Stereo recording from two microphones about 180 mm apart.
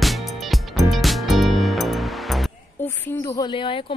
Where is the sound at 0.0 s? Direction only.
Centre (ahead or behind).